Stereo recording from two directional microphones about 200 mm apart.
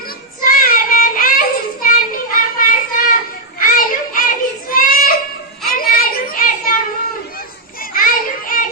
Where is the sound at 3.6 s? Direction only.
45° left (ahead or behind).